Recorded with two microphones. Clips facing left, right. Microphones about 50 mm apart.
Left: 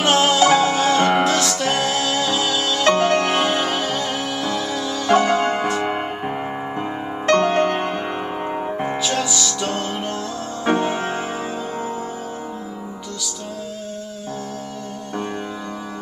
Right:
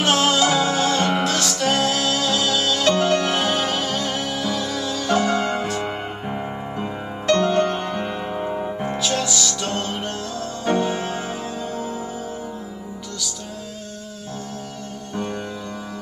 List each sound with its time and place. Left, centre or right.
0.0 s music: centre
0.4 s music: left
1.3 s music: centre
2.8 s music: left
3.4 s music: centre
5.0 s music: left
8.9 s music: centre
10.6 s music: left